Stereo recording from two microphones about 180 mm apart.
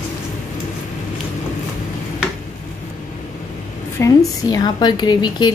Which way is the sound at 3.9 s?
20° left (ahead or behind).